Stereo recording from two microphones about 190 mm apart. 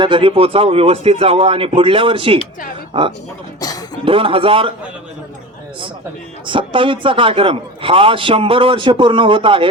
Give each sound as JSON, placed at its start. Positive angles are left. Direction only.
{"t": 0.0, "sound": "a man's voice", "side_deg": -25}
{"t": 6.5, "sound": "a man's voice", "side_deg": -25}